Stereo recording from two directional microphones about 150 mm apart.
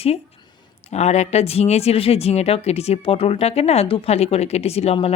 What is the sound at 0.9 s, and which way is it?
Speech, 45° left (ahead or behind).